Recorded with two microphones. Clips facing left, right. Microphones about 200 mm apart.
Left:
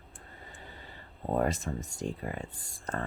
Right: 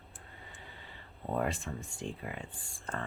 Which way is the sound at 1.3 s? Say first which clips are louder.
Left 4 dB; 40° left (ahead or behind).